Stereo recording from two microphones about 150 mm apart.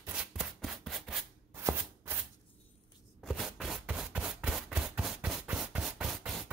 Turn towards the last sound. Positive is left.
turn(degrees=0)  # may be behind; listen again after turning